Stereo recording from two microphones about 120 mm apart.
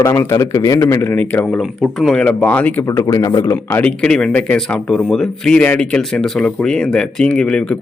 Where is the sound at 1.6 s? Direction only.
Centre (ahead or behind).